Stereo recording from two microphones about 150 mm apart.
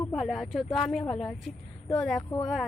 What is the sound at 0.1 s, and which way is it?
A woman's voice, centre (ahead or behind).